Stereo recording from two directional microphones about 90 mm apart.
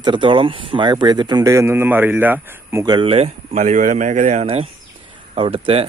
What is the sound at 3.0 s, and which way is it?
Speech, 90° right.